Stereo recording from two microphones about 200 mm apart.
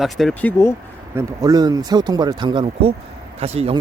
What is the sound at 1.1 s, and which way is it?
Speech, 15° right (ahead or behind).